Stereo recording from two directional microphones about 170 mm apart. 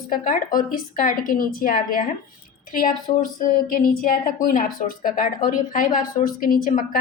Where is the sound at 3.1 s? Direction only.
45° left (ahead or behind).